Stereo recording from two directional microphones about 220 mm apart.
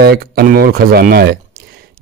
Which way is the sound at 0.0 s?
45° right (ahead or behind).